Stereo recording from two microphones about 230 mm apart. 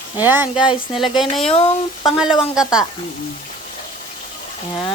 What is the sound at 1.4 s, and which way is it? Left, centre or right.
Speech, left.